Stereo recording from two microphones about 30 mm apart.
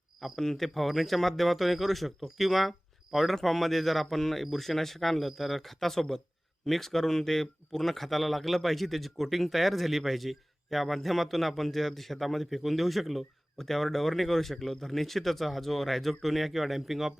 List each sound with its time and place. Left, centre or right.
0.3 s speech: centre